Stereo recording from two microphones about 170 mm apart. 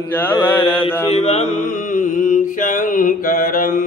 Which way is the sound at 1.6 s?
50° left (ahead or behind).